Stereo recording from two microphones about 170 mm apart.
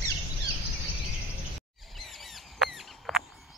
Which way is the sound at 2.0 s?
Centre (ahead or behind).